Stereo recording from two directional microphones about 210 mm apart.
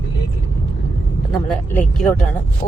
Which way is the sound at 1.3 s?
Centre (ahead or behind).